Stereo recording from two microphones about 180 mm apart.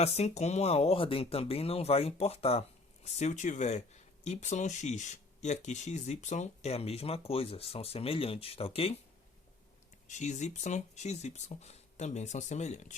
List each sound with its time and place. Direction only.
0.0 s speech: 40° left (ahead or behind)
10.1 s speech: 40° left (ahead or behind)